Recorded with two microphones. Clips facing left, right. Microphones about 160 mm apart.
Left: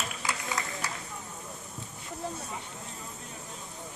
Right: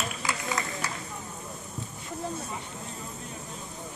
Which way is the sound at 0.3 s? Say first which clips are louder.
Right 2 dB; 60° right (ahead or behind).